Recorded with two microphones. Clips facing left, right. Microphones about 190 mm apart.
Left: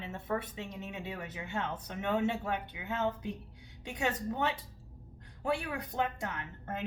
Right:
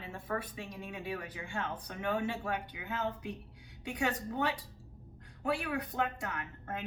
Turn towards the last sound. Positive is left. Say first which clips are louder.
# left 2 dB
turn(degrees=25)  # may be behind; listen again after turning